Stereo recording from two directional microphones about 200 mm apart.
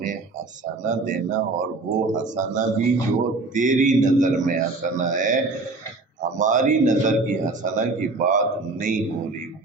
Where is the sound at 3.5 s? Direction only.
40° right (ahead or behind).